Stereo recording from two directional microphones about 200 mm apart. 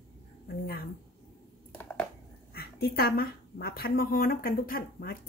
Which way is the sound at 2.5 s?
50° left (ahead or behind).